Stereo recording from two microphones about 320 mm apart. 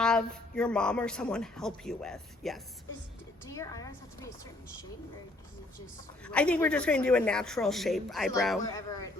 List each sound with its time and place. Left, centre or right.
0.0 s a woman's voice: centre
5.8 s speech: centre
8.6 s a woman's voice: centre